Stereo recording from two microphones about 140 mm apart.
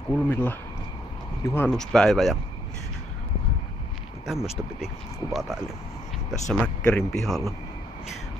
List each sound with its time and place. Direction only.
0.1 s speech: 15° left (ahead or behind)
1.7 s speech: 5° left (ahead or behind)
4.3 s speech: centre (ahead or behind)